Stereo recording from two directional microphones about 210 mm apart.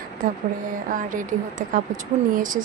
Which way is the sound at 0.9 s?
40° right (ahead or behind).